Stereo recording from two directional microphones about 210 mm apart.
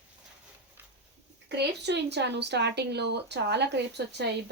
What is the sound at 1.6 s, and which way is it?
Speech, 55° right (ahead or behind).